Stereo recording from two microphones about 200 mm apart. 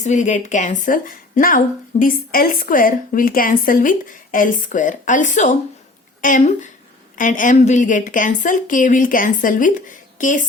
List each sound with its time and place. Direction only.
0.0 s a woman's voice: 35° left (ahead or behind)